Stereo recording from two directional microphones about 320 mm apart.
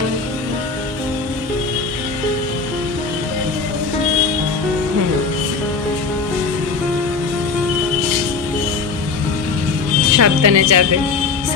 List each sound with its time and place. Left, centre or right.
10.1 s speech: right